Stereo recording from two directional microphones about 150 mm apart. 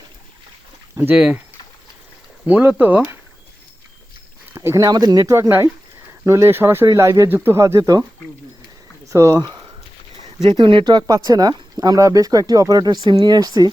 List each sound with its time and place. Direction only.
0.9 s speech: 10° right (ahead or behind)
2.5 s speech: 10° right (ahead or behind)
4.5 s speech: 20° right (ahead or behind)
9.0 s speech: 20° right (ahead or behind)